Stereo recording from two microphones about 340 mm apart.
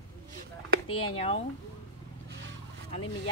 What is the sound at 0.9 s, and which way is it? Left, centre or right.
Speech, centre.